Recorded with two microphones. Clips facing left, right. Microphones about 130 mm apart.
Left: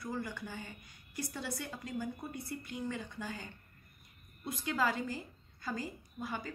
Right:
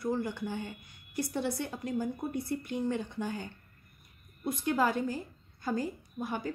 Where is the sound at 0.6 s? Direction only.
55° right (ahead or behind).